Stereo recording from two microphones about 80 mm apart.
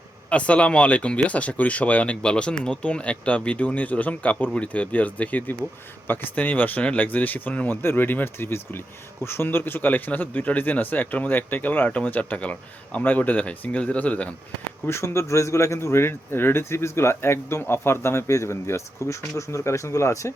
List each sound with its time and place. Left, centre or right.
0.3 s speech: centre
14.8 s speech: left